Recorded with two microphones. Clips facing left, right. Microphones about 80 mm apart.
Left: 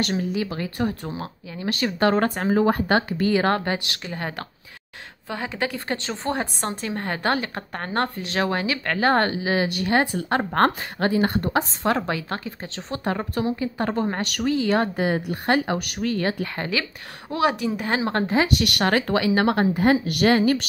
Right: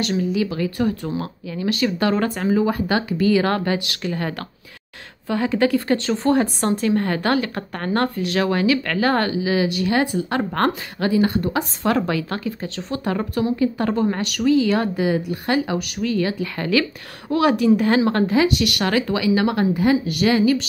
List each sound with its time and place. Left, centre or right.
0.0 s speech: left
2.0 s speech: left
4.0 s speech: left
5.3 s speech: centre; by 11.6 s left
11.8 s speech: left
16.5 s speech: left